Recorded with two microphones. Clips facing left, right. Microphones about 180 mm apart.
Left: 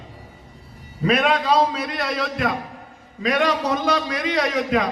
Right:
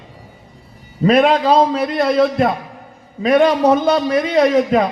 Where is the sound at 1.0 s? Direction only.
30° right (ahead or behind).